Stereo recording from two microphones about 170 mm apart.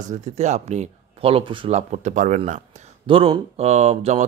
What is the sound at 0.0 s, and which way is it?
Speech, 45° right (ahead or behind).